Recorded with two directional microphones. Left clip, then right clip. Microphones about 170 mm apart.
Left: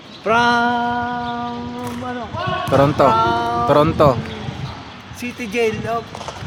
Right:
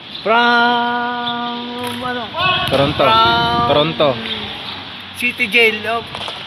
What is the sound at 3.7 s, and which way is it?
Speech, 35° left (ahead or behind).